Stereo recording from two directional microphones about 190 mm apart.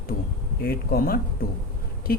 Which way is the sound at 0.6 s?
55° left (ahead or behind).